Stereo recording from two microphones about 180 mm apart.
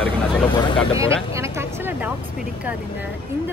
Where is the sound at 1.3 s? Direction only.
15° right (ahead or behind).